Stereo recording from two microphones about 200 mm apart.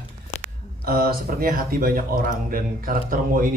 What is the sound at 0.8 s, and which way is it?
Speech, 50° right (ahead or behind).